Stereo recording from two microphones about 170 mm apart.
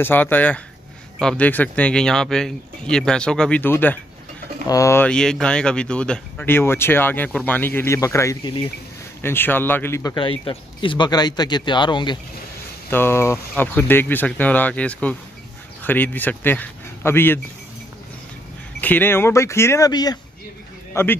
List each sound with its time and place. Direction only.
0.0 s speech: 10° left (ahead or behind)
10.1 s speech: 30° left (ahead or behind)
12.9 s speech: 15° left (ahead or behind)
18.8 s a man's voice: 10° left (ahead or behind)